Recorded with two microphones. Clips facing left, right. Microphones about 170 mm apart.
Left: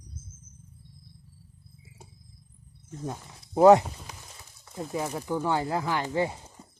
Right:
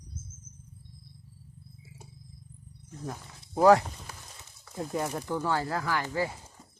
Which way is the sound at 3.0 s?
20° left (ahead or behind).